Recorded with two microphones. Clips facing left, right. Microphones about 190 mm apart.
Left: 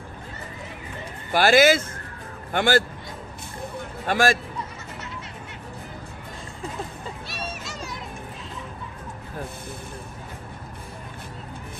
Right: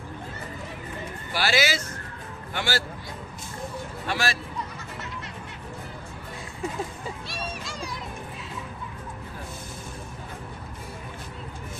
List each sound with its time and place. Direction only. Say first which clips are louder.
1.3 s speech: left 9 dB; 50° left (ahead or behind)
4.0 s speech: left 8 dB; 50° left (ahead or behind)
7.2 s music: even; 5° left (ahead or behind)